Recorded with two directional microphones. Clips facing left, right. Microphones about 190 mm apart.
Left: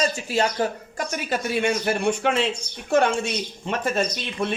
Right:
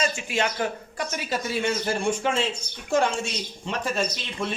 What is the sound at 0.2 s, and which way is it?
Speech, 35° left (ahead or behind).